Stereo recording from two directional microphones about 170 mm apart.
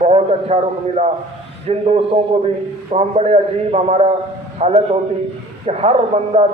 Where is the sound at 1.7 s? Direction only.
35° right (ahead or behind).